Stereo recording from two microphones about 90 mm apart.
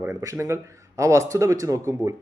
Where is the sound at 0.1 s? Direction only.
35° right (ahead or behind).